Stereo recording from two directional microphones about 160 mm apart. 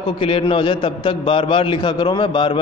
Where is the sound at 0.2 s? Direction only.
35° left (ahead or behind).